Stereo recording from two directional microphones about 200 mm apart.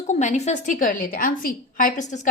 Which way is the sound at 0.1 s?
35° left (ahead or behind).